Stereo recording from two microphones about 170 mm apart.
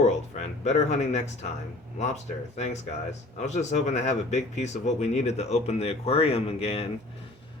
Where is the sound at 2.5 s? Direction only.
40° left (ahead or behind).